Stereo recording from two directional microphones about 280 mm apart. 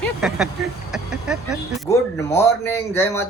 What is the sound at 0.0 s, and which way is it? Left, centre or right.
Vehicle, centre.